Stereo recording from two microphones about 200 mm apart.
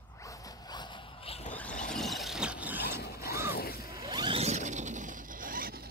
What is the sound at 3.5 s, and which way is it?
Zipper, 50° left (ahead or behind).